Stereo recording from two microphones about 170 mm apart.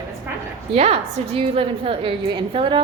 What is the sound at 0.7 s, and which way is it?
A woman's voice, 40° right (ahead or behind).